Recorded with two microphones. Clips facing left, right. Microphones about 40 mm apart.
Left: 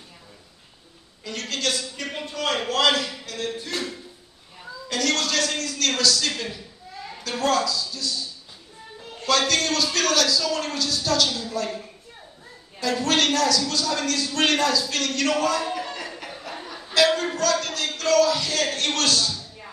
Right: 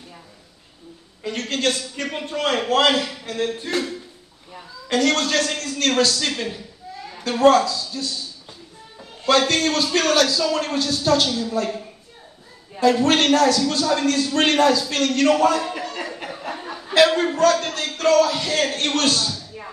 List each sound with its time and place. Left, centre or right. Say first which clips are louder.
1.2 s a man's voice: right 5 dB; right
4.8 s a man's voice: right 5 dB; right
9.2 s a man's voice: right 4 dB; right
12.7 s a man's voice: right 6 dB; right
16.7 s a man's voice: right 4 dB; right